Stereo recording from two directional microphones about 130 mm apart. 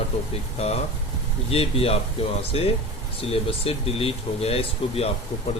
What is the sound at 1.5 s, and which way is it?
Speech, 50° left (ahead or behind).